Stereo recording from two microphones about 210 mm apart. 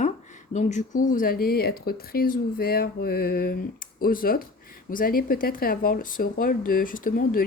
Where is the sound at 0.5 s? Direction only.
35° left (ahead or behind).